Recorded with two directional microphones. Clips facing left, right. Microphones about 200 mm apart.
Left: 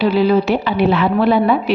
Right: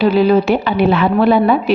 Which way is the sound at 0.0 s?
50° right (ahead or behind).